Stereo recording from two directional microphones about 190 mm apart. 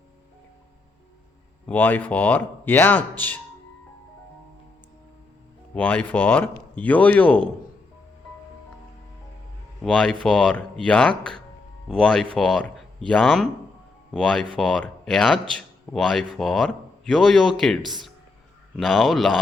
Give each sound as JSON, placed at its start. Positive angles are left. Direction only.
{"t": 1.6, "sound": "speech", "side_deg": 10}
{"t": 5.7, "sound": "speech", "side_deg": 10}
{"t": 9.8, "sound": "speech", "side_deg": 0}